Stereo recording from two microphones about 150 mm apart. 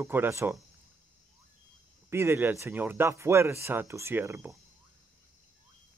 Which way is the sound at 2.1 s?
15° right (ahead or behind).